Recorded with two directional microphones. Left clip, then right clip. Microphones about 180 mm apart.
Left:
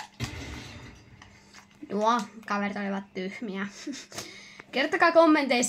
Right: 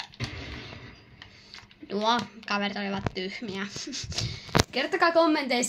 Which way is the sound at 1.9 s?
30° left (ahead or behind).